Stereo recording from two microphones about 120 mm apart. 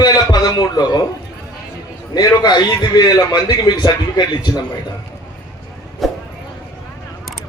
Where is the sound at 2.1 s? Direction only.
35° left (ahead or behind).